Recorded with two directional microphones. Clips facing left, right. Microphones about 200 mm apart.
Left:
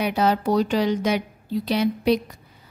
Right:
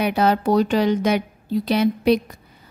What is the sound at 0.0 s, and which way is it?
Speech, 60° right (ahead or behind).